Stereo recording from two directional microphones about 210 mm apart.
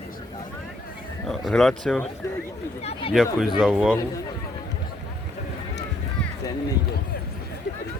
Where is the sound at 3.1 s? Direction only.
Centre (ahead or behind).